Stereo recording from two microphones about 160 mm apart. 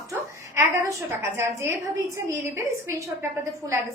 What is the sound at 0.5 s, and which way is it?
A woman's voice, 20° right (ahead or behind).